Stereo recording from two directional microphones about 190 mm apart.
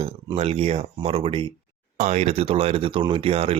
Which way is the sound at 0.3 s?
35° right (ahead or behind).